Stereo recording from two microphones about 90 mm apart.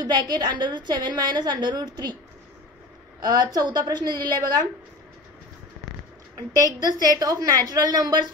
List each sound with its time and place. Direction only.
0.0 s a woman's voice: 50° right (ahead or behind)
3.2 s a woman's voice: 45° right (ahead or behind)
6.5 s a woman's voice: 45° right (ahead or behind)